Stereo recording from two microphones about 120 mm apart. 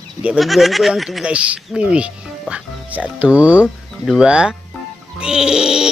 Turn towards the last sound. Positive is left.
turn(degrees=-5)  # may be behind; listen again after turning